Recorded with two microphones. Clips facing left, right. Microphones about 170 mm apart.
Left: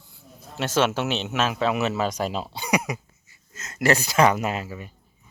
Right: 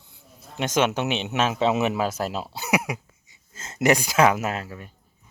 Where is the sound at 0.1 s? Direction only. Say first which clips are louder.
Left 2 dB; 15° right (ahead or behind).